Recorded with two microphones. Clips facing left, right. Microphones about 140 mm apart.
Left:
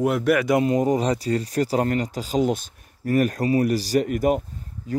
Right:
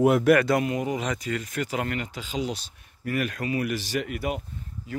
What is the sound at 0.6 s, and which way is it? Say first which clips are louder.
Speech: left 7 dB; 40° left (ahead or behind).